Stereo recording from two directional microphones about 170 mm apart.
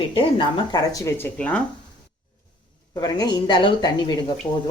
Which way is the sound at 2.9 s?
20° left (ahead or behind).